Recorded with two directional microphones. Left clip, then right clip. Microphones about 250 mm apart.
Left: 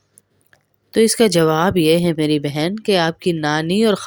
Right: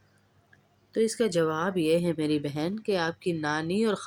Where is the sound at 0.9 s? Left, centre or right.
Left.